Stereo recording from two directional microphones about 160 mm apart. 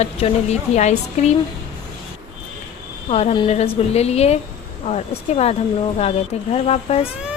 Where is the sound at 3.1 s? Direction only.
40° left (ahead or behind).